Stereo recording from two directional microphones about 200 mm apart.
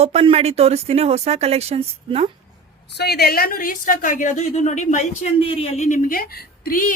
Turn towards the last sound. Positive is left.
turn(degrees=45)  # may be behind; listen again after turning